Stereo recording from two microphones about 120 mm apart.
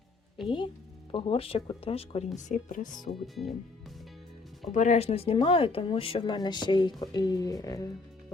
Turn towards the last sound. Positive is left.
turn(degrees=30)  # may be behind; listen again after turning